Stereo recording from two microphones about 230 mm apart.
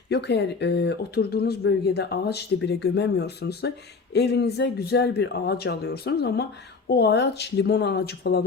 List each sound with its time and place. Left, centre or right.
0.1 s speech: left